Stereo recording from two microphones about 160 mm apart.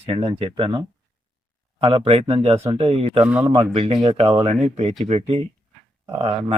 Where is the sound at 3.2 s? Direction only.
10° right (ahead or behind).